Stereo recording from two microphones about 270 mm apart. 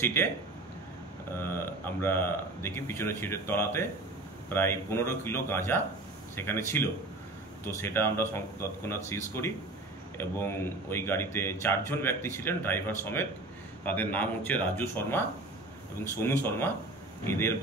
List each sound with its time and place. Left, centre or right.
0.0 s speech: centre
1.4 s speech: centre